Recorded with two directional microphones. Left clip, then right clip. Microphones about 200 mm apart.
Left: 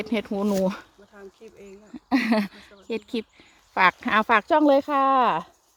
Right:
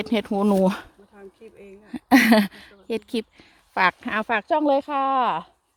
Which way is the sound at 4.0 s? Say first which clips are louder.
Left 4 dB; 5° left (ahead or behind).